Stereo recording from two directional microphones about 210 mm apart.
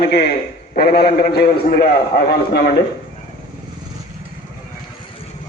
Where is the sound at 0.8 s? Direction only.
50° left (ahead or behind).